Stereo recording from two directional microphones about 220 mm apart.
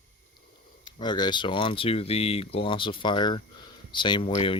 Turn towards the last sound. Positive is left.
turn(degrees=25)  # may be behind; listen again after turning